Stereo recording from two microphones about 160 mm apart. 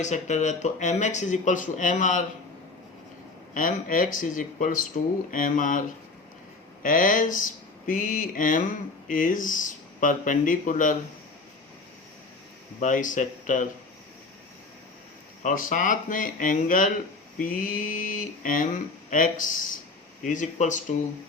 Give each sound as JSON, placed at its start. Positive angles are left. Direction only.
{"t": 0.0, "sound": "speech", "side_deg": 50}
{"t": 3.5, "sound": "speech", "side_deg": 55}
{"t": 6.8, "sound": "speech", "side_deg": 55}
{"t": 12.8, "sound": "speech", "side_deg": 55}
{"t": 15.4, "sound": "speech", "side_deg": 55}